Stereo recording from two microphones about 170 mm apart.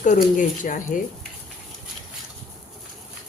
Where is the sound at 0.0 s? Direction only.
50° left (ahead or behind).